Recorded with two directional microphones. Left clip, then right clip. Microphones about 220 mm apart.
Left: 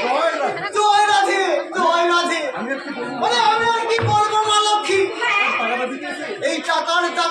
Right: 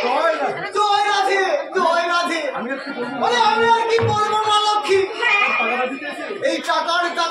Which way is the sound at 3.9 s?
15° left (ahead or behind).